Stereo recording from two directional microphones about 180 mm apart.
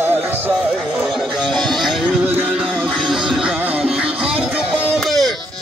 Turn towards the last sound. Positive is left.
turn(degrees=0)  # may be behind; listen again after turning